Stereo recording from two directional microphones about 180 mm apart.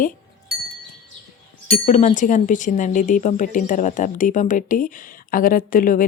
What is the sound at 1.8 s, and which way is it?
Speech, 45° left (ahead or behind).